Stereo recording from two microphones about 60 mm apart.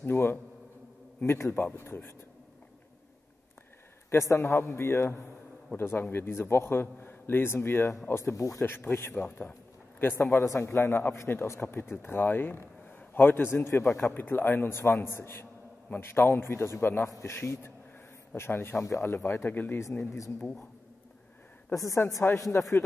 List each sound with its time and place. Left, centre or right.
0.0 s a man's voice: left
4.2 s a man's voice: left
8.1 s speech: left
8.6 s a man's voice: left
10.4 s a man's voice: left
18.8 s a man's voice: left
21.7 s speech: left